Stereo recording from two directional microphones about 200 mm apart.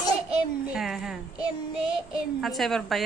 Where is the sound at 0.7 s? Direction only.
Centre (ahead or behind).